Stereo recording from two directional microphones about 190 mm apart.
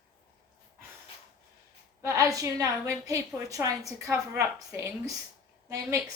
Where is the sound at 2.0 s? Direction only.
15° right (ahead or behind).